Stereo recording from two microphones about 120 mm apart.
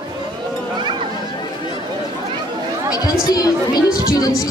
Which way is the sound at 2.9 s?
30° left (ahead or behind).